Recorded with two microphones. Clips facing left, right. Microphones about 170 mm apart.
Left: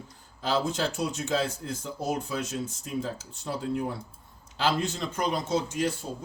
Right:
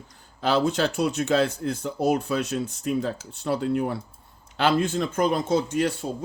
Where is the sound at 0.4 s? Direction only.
65° right (ahead or behind).